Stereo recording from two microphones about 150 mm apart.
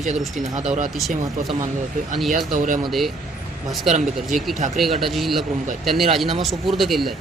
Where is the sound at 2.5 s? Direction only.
60° right (ahead or behind).